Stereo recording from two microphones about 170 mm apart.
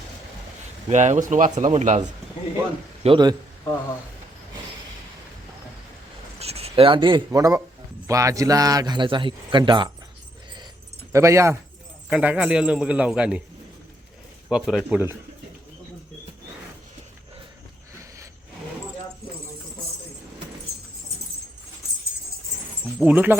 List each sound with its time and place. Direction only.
0.9 s speech: 45° right (ahead or behind)
3.0 s a man's voice: 30° right (ahead or behind)
6.4 s a sound: 35° right (ahead or behind)
7.3 s a man's voice: 20° right (ahead or behind)
11.1 s a man's voice: 15° right (ahead or behind)
14.5 s speech: 5° right (ahead or behind)
23.0 s a man's voice: 10° right (ahead or behind)